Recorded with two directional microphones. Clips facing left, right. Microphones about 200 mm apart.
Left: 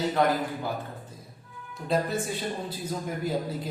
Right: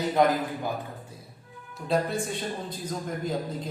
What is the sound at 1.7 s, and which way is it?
A man's voice, centre (ahead or behind).